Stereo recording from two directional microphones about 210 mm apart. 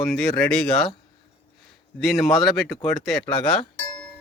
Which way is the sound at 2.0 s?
Centre (ahead or behind).